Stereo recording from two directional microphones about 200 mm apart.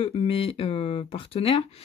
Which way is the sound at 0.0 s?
25° left (ahead or behind).